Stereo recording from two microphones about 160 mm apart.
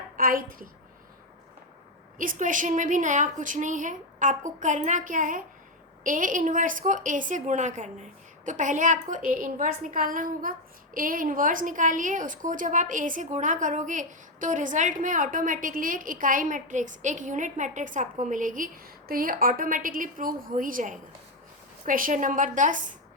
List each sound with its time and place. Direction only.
0.2 s a woman's voice: 60° right (ahead or behind)
2.1 s a woman's voice: 55° right (ahead or behind)